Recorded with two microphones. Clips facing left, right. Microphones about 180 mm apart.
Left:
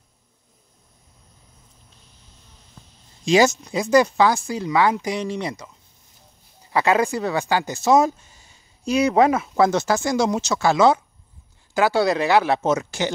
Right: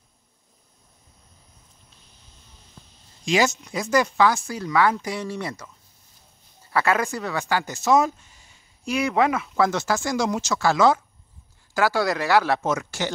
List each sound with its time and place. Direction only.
3.3 s speech: 30° left (ahead or behind)
4.5 s speech: 20° left (ahead or behind)
6.7 s speech: 20° left (ahead or behind)